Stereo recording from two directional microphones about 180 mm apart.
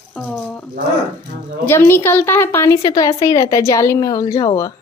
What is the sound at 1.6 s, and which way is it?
A woman's voice, 10° left (ahead or behind).